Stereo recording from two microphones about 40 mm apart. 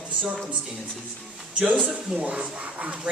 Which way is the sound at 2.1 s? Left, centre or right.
Right.